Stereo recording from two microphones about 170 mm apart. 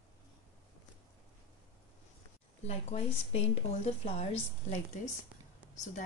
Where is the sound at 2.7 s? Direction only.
40° left (ahead or behind).